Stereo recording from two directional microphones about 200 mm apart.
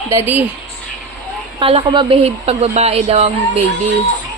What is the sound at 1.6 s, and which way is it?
Speech, 25° right (ahead or behind).